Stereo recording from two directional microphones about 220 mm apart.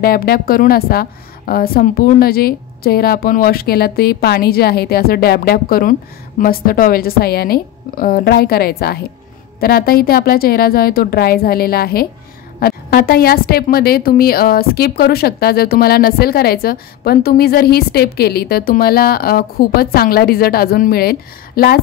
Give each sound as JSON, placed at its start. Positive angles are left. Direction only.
{"t": 0.0, "sound": "a woman's voice", "side_deg": 45}